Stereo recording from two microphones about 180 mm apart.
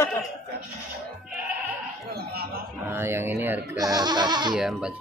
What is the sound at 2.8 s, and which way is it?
Speech, 15° right (ahead or behind).